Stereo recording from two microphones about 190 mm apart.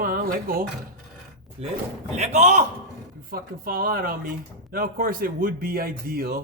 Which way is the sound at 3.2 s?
50° right (ahead or behind).